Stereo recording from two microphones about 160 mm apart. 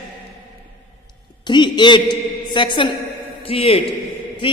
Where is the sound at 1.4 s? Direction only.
30° left (ahead or behind).